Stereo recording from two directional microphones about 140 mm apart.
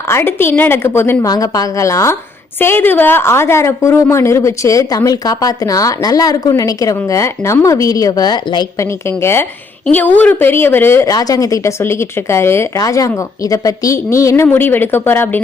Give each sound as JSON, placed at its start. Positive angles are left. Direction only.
{"t": 0.1, "sound": "a woman's voice", "side_deg": 15}
{"t": 9.0, "sound": "a woman's voice", "side_deg": 15}